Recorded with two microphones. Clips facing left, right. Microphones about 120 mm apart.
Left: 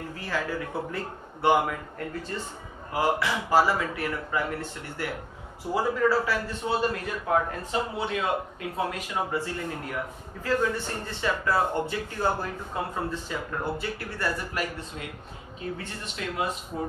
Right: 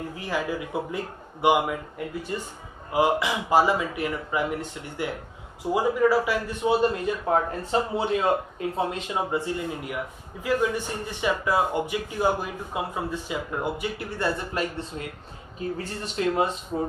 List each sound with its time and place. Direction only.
0.1 s a man's voice: 15° right (ahead or behind)